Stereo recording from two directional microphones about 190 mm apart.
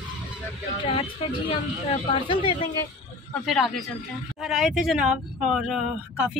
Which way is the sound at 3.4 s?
Centre (ahead or behind).